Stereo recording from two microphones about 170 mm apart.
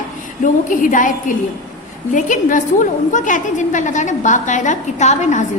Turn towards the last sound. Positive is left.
turn(degrees=45)  # may be behind; listen again after turning